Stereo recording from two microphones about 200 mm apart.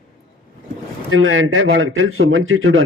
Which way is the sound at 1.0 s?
85° right.